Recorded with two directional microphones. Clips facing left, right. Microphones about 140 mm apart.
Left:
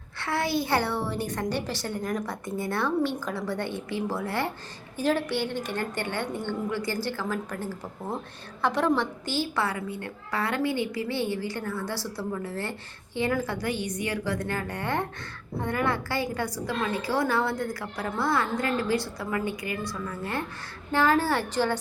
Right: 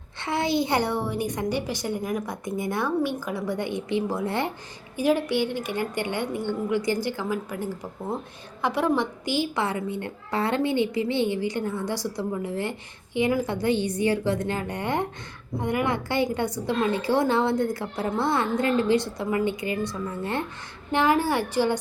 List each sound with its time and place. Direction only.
0.2 s a woman's voice: 20° right (ahead or behind)